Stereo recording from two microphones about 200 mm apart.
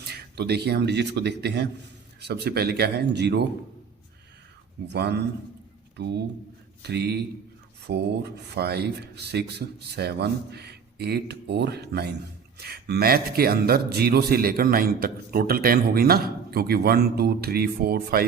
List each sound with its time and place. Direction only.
0.1 s speech: 55° right (ahead or behind)
4.9 s speech: 55° right (ahead or behind)